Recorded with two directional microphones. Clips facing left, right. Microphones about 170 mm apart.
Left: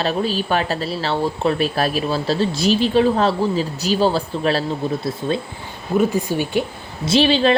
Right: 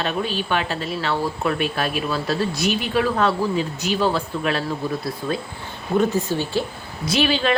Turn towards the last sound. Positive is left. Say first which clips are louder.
# left 5 dB
turn(degrees=30)  # may be behind; listen again after turning